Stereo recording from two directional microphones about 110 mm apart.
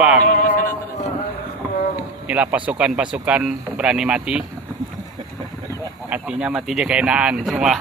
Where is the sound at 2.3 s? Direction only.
15° right (ahead or behind).